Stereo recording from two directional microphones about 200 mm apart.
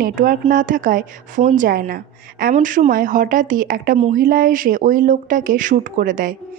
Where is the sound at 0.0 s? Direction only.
45° right (ahead or behind).